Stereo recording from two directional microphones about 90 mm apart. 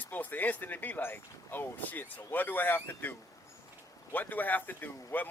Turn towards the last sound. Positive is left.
turn(degrees=20)  # may be behind; listen again after turning